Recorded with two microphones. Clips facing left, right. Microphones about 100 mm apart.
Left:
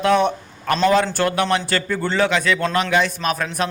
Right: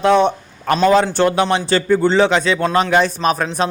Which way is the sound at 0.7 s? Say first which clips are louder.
Right 3 dB; 20° right (ahead or behind).